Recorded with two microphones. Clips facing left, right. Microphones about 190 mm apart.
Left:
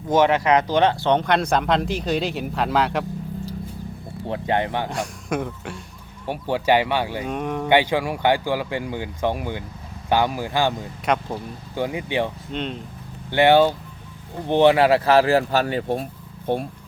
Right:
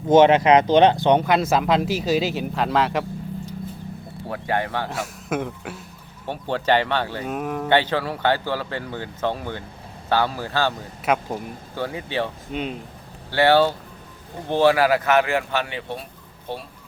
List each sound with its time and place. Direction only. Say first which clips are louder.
0.1 s speech: right 4 dB; 20° right (ahead or behind)
1.2 s speech: right 1 dB; 5° right (ahead or behind)
4.3 s speech: left 2 dB; 20° left (ahead or behind)
4.9 s speech: left 1 dB; 5° right (ahead or behind)
6.2 s speech: left 2 dB; 10° left (ahead or behind)
7.3 s speech: left 1 dB; 5° right (ahead or behind)
7.7 s speech: left 2 dB; 15° left (ahead or behind)
11.0 s speech: right 1 dB; 5° right (ahead or behind)
11.7 s speech: left 3 dB; 15° left (ahead or behind)
12.5 s speech: even; 5° right (ahead or behind)
13.3 s speech: left 2 dB; 15° left (ahead or behind); by 16.0 s 45° left (ahead or behind)
16.5 s speech: left 8 dB; 55° left (ahead or behind)